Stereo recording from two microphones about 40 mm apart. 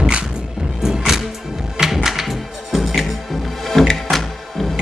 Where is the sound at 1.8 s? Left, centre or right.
Centre.